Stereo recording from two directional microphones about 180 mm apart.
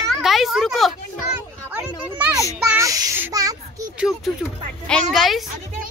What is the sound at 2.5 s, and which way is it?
Speech, 10° right (ahead or behind).